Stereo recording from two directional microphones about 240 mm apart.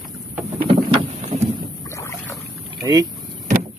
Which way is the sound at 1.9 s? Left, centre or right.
Centre.